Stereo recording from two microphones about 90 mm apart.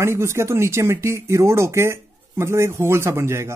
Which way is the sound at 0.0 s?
30° right (ahead or behind).